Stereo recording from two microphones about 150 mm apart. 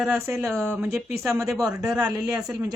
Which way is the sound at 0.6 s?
15° right (ahead or behind).